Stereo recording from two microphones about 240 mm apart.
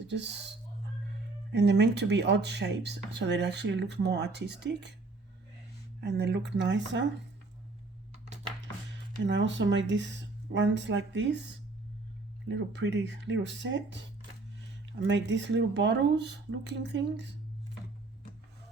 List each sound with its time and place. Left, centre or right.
1.5 s speech: right
6.0 s speech: right
9.2 s speech: right
12.5 s speech: right